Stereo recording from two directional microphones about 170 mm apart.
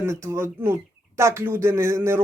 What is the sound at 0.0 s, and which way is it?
Speech, 15° right (ahead or behind).